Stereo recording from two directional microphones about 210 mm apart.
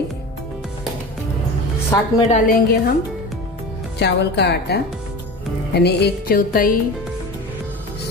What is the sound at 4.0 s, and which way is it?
A woman's voice, 55° left (ahead or behind).